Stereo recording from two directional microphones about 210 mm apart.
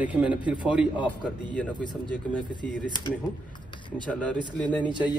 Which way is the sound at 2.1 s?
5° left (ahead or behind).